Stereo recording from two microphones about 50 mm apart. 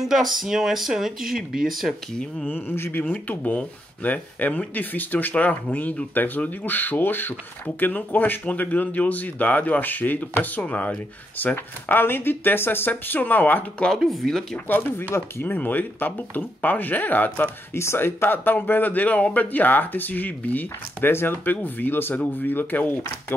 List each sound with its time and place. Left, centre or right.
0.1 s speech: centre
2.4 s speech: left
3.1 s speech: left
11.5 s speech: left
13.9 s speech: centre
14.9 s speech: left
17.7 s speech: left
20.6 s speech: left